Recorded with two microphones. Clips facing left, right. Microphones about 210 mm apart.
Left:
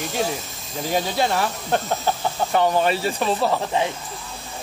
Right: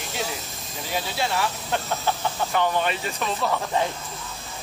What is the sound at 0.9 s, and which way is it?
Speech, 45° left (ahead or behind).